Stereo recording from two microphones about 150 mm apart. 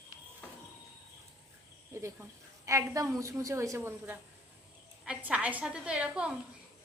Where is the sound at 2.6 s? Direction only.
20° right (ahead or behind).